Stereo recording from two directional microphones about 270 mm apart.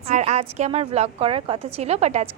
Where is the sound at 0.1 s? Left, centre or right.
Right.